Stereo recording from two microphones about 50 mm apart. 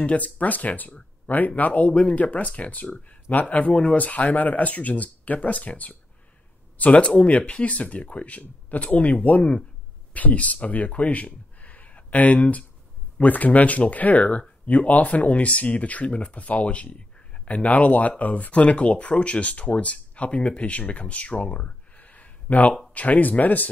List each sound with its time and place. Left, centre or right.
0.0 s speech: left
9.4 s speech: centre
10.1 s speech: left